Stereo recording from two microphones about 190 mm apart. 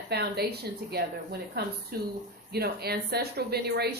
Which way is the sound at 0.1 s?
60° right (ahead or behind).